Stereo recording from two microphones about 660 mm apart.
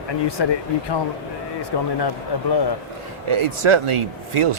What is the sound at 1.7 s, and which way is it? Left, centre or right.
Speech, left.